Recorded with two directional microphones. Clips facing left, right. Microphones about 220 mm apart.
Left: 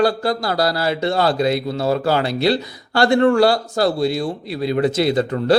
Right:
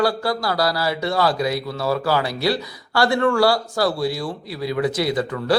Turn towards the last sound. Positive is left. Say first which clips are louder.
# left 4 dB
turn(degrees=25)  # may be behind; listen again after turning